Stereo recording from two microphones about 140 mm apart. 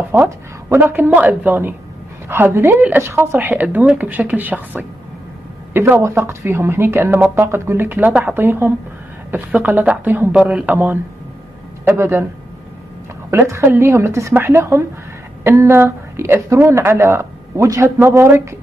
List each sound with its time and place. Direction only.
0.1 s speech: 15° right (ahead or behind)
13.3 s a woman's voice: 20° right (ahead or behind)